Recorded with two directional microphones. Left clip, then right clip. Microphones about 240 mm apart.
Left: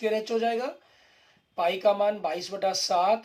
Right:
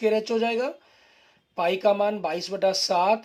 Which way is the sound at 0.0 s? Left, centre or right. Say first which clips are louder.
Right 3 dB; right.